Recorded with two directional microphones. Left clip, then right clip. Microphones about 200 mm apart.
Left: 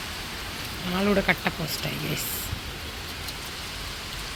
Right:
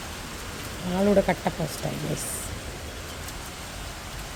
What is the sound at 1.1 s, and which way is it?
Speech, 15° right (ahead or behind).